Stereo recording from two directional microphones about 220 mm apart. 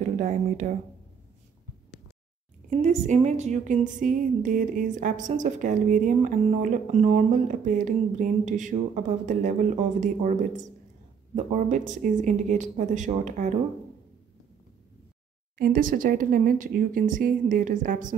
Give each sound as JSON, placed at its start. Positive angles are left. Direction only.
{"t": 0.2, "sound": "a woman's voice", "side_deg": -35}
{"t": 2.7, "sound": "a woman's voice", "side_deg": -30}
{"t": 15.5, "sound": "a woman's voice", "side_deg": -40}